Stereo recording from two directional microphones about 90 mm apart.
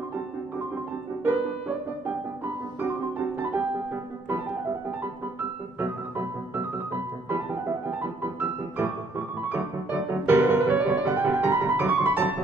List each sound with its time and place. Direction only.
1.2 s music: 20° right (ahead or behind)
5.8 s music: 25° right (ahead or behind)
9.5 s music: 25° right (ahead or behind)